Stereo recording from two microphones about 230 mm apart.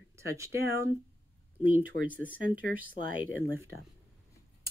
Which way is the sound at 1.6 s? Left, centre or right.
Centre.